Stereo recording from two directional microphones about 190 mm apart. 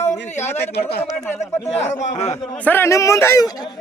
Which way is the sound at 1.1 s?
10° left (ahead or behind).